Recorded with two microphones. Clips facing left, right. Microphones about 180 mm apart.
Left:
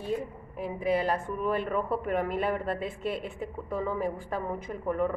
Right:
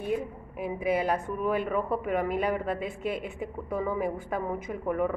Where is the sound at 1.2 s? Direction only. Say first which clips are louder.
Right 1 dB; 10° right (ahead or behind).